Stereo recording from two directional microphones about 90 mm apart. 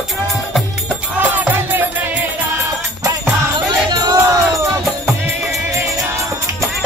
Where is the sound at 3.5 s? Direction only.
50° right (ahead or behind).